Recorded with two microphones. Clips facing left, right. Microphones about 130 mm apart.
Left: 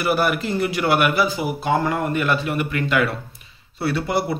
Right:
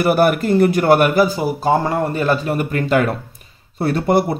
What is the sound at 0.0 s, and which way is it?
A man's voice, 50° right (ahead or behind).